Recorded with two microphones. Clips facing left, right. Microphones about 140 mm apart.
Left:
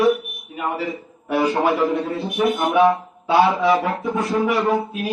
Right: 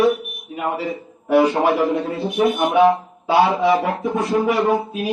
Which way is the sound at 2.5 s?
25° right (ahead or behind).